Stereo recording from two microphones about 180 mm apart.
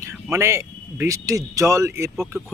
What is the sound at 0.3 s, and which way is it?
A man's voice, 15° right (ahead or behind).